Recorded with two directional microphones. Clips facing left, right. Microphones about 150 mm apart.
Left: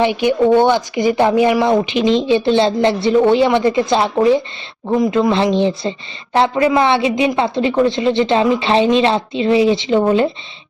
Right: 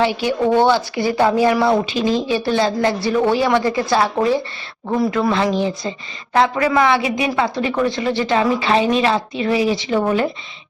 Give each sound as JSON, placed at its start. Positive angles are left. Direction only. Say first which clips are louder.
{"t": 0.0, "sound": "speech", "louder": "left 4 dB", "side_deg": 20}